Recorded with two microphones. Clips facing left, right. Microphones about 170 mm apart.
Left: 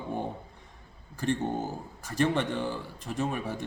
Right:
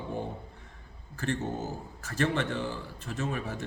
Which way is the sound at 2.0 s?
15° left (ahead or behind).